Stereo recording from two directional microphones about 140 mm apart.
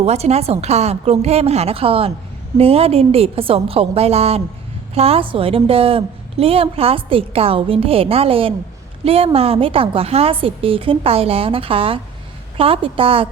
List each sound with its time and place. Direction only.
0.0 s a woman's voice: 50° right (ahead or behind)